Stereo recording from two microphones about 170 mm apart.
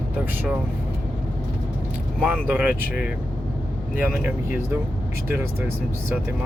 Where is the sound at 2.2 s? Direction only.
10° right (ahead or behind).